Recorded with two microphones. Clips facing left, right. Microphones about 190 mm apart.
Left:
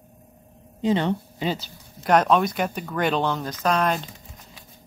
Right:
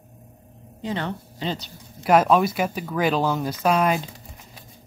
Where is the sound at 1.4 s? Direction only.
5° left (ahead or behind).